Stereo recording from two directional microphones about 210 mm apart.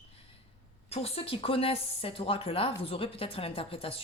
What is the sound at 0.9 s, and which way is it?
A woman's voice, 30° left (ahead or behind).